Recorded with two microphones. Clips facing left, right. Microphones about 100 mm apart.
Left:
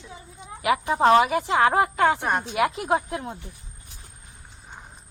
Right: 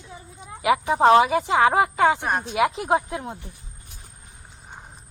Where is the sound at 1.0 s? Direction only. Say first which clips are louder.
Right 2 dB; 25° right (ahead or behind).